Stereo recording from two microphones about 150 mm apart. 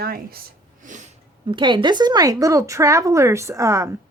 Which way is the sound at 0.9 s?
60° right (ahead or behind).